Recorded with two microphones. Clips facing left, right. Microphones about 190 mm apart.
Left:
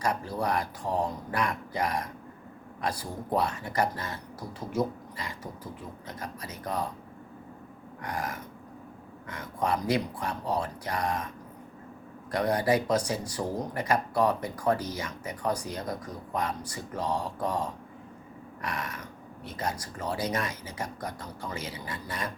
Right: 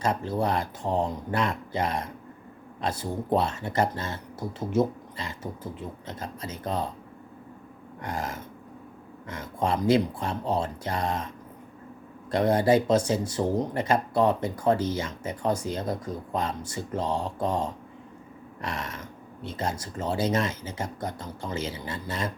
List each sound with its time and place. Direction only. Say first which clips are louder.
0.0 s speech: right 3 dB; 25° right (ahead or behind)
8.0 s speech: right 2 dB; 25° right (ahead or behind)
12.3 s speech: right 4 dB; 25° right (ahead or behind)